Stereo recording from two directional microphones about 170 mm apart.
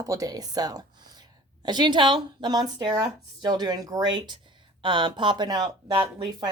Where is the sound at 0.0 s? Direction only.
20° right (ahead or behind).